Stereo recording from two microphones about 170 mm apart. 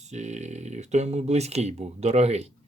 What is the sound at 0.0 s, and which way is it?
Speech, 40° right (ahead or behind).